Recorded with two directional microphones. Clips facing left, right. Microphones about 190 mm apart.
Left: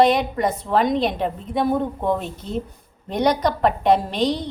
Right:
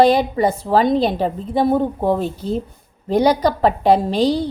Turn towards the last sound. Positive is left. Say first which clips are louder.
# right 4 dB
turn(degrees=-30)  # may be behind; listen again after turning